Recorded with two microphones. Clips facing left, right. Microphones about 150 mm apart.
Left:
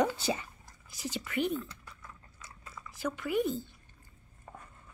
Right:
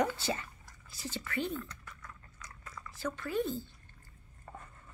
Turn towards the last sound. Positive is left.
turn(degrees=10)  # may be behind; listen again after turning